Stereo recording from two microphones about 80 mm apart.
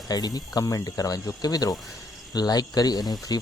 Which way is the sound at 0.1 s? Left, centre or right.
Left.